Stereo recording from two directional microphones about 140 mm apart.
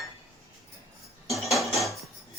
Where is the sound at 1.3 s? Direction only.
Centre (ahead or behind).